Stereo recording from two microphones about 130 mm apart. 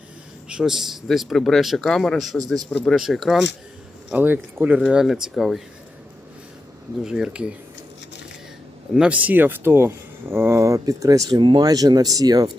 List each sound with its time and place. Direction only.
0.4 s speech: 5° right (ahead or behind)
4.1 s speech: 15° right (ahead or behind)
7.0 s speech: 5° right (ahead or behind)
9.0 s speech: 10° right (ahead or behind); by 12.5 s 30° right (ahead or behind)